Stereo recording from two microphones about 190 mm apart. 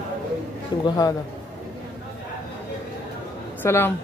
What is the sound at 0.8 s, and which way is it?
Speech, 20° left (ahead or behind).